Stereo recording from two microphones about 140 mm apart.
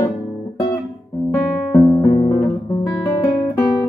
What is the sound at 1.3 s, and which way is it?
Guitar, 10° left (ahead or behind).